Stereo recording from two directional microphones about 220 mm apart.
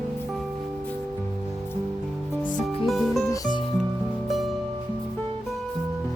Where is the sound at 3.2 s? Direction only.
20° left (ahead or behind).